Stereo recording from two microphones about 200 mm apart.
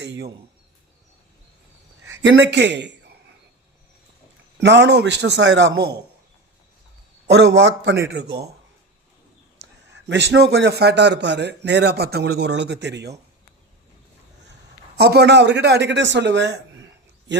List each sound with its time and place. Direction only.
0.0 s a sound: 60° right (ahead or behind)
2.0 s speech: 65° right (ahead or behind)
4.6 s a man's voice: 60° right (ahead or behind)
7.3 s a man's voice: 60° right (ahead or behind)
9.6 s a man's voice: 60° right (ahead or behind)
14.9 s speech: 55° right (ahead or behind)